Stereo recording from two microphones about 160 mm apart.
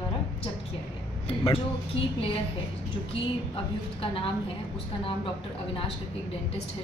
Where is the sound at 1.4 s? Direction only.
35° left (ahead or behind).